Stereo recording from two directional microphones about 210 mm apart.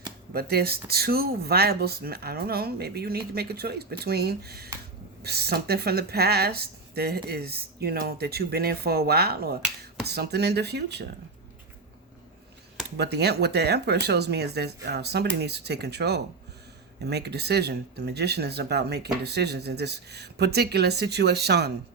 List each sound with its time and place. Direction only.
0.3 s speech: 50° right (ahead or behind)
13.0 s speech: 50° right (ahead or behind)